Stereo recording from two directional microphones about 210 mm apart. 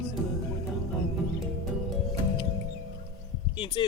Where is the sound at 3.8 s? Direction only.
25° left (ahead or behind).